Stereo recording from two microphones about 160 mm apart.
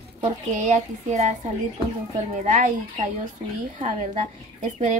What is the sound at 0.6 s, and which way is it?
Speech, 45° right (ahead or behind).